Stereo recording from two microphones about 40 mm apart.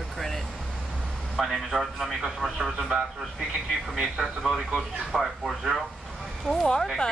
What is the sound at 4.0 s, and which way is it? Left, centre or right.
A man's voice, centre.